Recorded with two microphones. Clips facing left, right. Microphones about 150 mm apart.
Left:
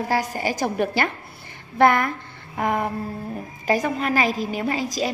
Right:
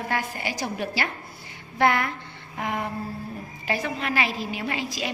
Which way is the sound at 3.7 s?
45° left (ahead or behind).